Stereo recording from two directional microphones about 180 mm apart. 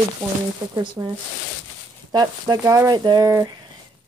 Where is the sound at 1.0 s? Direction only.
15° right (ahead or behind).